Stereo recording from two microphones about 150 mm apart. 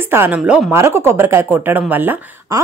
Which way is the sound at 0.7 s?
15° right (ahead or behind).